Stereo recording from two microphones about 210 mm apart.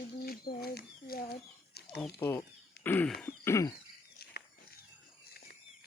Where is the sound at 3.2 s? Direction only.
10° left (ahead or behind).